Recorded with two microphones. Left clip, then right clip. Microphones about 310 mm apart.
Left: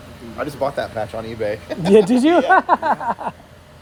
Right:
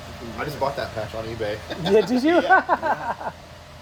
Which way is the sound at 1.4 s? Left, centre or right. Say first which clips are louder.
Left 6 dB; left.